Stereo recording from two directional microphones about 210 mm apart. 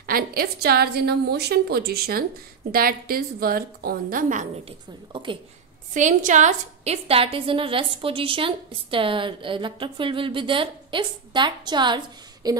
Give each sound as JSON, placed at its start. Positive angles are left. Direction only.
{"t": 0.0, "sound": "a woman's voice", "side_deg": -45}
{"t": 5.1, "sound": "a woman's voice", "side_deg": -25}
{"t": 5.9, "sound": "a woman's voice", "side_deg": -35}